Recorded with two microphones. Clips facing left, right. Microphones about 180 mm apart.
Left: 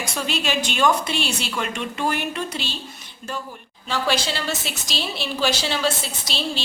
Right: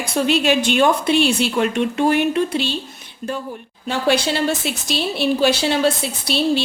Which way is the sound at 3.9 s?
55° right (ahead or behind).